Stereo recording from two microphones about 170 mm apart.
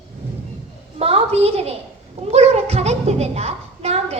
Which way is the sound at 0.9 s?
35° right (ahead or behind).